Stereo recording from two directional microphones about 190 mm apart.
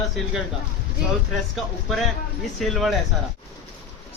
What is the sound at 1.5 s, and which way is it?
Speech, centre (ahead or behind).